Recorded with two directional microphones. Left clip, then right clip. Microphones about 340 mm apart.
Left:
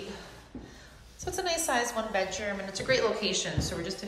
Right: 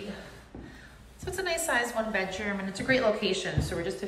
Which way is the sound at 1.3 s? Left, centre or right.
Centre.